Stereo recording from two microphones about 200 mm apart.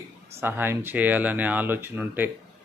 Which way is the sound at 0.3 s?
10° right (ahead or behind).